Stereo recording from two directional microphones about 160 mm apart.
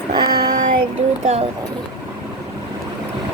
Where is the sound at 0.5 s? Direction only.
55° right (ahead or behind).